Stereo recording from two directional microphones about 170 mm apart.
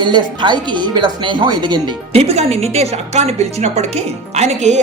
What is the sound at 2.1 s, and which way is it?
A woman's voice, 40° right (ahead or behind).